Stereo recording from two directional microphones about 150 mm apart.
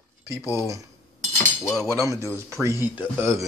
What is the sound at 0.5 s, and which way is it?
Speech, 20° right (ahead or behind).